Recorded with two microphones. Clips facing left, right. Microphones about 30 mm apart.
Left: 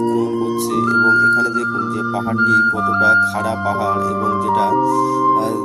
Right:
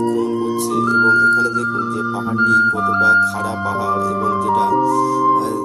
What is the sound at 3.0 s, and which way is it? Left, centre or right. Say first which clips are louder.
Music: even; centre.